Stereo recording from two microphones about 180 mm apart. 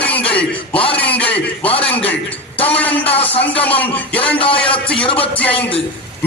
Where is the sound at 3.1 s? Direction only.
30° left (ahead or behind).